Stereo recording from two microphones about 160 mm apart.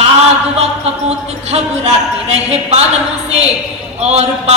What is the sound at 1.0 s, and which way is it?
Speech, 45° right (ahead or behind).